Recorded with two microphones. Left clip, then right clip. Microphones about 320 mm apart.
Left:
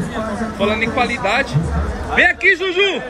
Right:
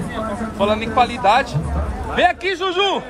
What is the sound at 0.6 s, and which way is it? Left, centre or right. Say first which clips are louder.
Speech: right 1 dB; centre.